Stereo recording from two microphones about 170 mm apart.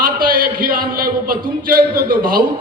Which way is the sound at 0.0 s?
55° right (ahead or behind).